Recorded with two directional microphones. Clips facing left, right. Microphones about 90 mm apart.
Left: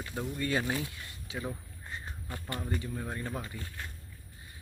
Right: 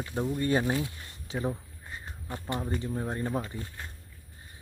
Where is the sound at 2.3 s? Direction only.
25° right (ahead or behind).